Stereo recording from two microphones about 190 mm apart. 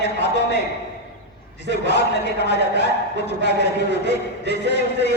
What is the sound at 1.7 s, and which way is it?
Speech, 65° left (ahead or behind).